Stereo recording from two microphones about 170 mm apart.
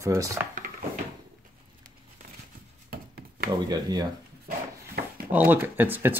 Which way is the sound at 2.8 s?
60° right (ahead or behind).